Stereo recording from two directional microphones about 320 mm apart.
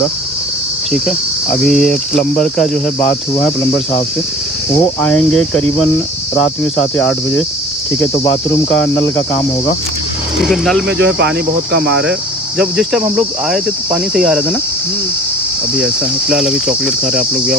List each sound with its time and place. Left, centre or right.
0.9 s cricket: centre
10.5 s cricket: centre
10.9 s cricket: right
12.1 s cricket: centre
15.7 s cricket: centre